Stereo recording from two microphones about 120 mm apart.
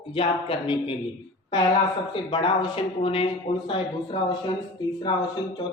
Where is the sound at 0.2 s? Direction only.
50° left (ahead or behind).